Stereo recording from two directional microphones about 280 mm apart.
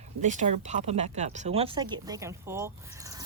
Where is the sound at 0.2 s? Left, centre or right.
Right.